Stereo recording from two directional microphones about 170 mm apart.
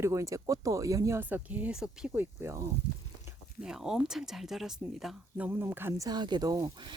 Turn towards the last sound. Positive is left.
turn(degrees=-25)  # may be behind; listen again after turning